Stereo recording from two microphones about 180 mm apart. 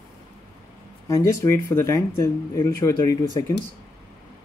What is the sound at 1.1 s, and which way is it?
Speech, 20° left (ahead or behind).